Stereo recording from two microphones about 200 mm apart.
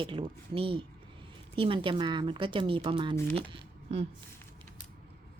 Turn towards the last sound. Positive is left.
turn(degrees=-25)  # may be behind; listen again after turning